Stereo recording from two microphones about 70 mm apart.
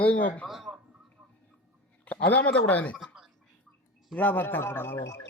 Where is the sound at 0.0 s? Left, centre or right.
Left.